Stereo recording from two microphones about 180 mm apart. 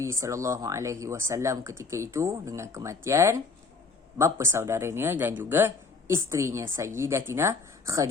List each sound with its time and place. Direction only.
0.0 s speech: 15° right (ahead or behind)